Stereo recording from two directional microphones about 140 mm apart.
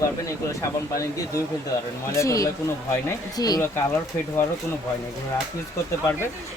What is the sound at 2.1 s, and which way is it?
A woman's voice, 25° left (ahead or behind).